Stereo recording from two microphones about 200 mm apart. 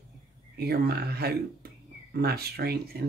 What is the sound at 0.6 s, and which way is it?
Speech, 50° right (ahead or behind).